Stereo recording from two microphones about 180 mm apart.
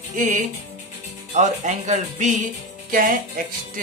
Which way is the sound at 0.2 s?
45° right (ahead or behind).